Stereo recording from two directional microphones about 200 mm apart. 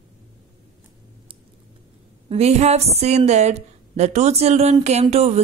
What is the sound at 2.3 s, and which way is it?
A woman's voice, 30° right (ahead or behind).